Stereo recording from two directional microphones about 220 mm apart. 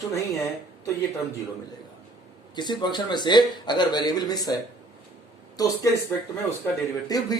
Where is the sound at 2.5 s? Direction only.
20° left (ahead or behind).